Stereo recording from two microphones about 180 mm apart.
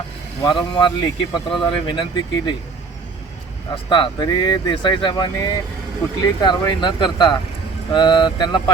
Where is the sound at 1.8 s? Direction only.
25° left (ahead or behind).